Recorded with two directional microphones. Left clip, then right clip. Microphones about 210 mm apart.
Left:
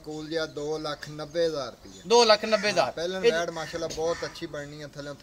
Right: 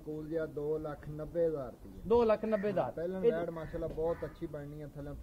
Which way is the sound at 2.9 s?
10° left (ahead or behind).